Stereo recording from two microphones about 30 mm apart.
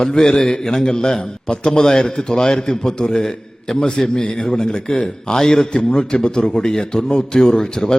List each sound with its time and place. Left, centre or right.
0.1 s a man's voice: left
6.4 s a man's voice: left